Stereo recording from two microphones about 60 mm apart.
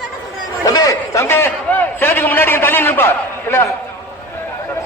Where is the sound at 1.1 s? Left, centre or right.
Left.